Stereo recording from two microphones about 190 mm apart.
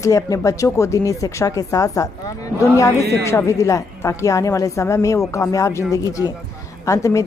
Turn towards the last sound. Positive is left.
turn(degrees=15)  # may be behind; listen again after turning